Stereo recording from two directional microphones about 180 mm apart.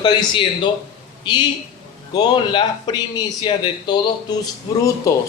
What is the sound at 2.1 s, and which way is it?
Speech, 25° left (ahead or behind).